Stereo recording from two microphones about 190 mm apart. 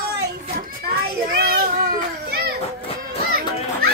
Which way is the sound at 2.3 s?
50° right (ahead or behind).